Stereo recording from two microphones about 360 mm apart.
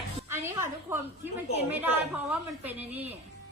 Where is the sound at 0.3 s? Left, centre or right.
Centre.